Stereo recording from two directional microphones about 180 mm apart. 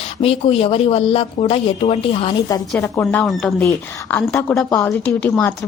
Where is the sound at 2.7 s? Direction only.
10° left (ahead or behind).